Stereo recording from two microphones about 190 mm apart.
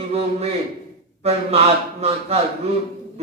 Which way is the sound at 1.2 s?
30° right (ahead or behind).